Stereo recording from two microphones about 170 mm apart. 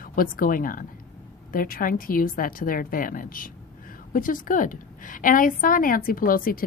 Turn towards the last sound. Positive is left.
turn(degrees=55)  # may be behind; listen again after turning